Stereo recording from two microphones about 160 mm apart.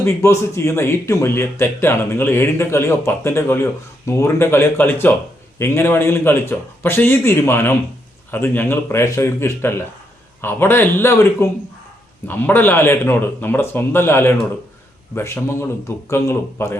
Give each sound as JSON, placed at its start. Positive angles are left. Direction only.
{"t": 0.0, "sound": "a man's voice", "side_deg": 15}